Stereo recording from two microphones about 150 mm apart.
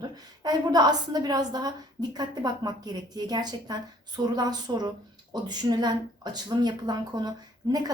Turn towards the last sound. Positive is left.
turn(degrees=-25)  # may be behind; listen again after turning